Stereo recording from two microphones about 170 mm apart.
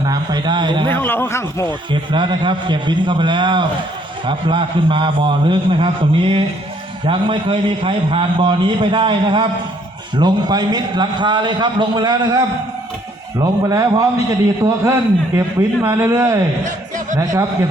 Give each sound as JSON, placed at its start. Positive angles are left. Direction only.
{"t": 0.1, "sound": "a man's voice", "side_deg": -25}
{"t": 0.9, "sound": "speech", "side_deg": 10}
{"t": 1.9, "sound": "a man's voice", "side_deg": -30}
{"t": 13.4, "sound": "a man's voice", "side_deg": -20}